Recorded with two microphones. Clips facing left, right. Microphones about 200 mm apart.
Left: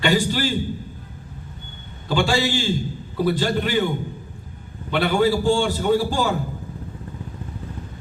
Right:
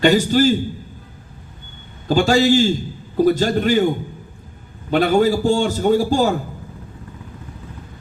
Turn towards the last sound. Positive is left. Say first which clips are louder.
# right 4 dB
turn(degrees=-40)  # may be behind; listen again after turning